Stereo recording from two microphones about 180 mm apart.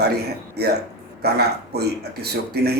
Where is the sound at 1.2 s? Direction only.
65° right (ahead or behind).